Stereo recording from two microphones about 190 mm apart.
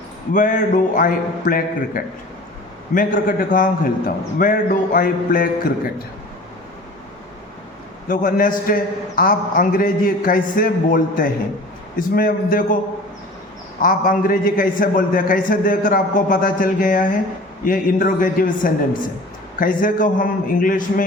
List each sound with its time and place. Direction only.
0.3 s a man's voice: 45° left (ahead or behind)
8.0 s a man's voice: 45° left (ahead or behind)
13.8 s a man's voice: 45° left (ahead or behind)